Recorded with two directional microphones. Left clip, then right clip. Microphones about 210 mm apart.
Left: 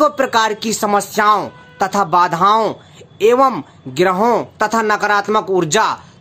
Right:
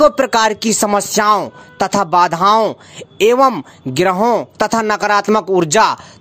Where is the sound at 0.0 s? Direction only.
35° right (ahead or behind).